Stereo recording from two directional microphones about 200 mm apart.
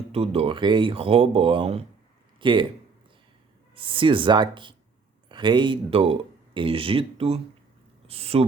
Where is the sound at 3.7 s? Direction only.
25° right (ahead or behind).